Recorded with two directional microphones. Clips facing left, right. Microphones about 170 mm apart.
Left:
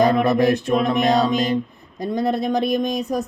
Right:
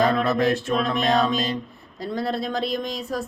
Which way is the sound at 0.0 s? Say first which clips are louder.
Left 4 dB; 15° left (ahead or behind).